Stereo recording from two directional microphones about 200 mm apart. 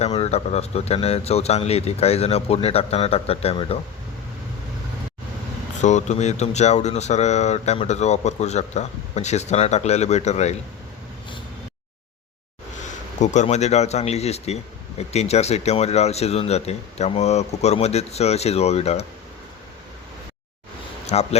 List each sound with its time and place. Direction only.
0.0 s speech: 30° left (ahead or behind)
5.8 s speech: 35° left (ahead or behind)
12.8 s speech: 35° left (ahead or behind)
21.1 s speech: 30° left (ahead or behind)